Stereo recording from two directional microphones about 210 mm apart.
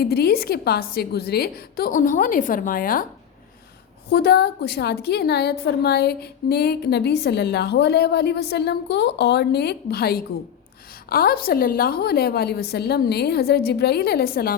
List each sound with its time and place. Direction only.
0.0 s a woman's voice: 50° left (ahead or behind)
4.1 s a woman's voice: 50° left (ahead or behind)